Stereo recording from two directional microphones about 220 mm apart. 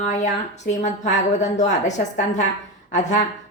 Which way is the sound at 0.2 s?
30° left (ahead or behind).